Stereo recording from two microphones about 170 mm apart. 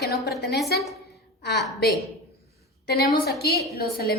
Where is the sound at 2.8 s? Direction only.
70° left (ahead or behind).